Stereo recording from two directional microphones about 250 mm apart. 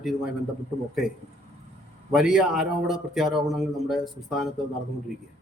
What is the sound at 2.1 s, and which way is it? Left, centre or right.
A man's voice, centre.